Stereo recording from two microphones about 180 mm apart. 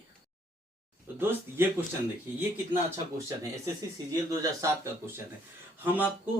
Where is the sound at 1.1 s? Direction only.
10° right (ahead or behind).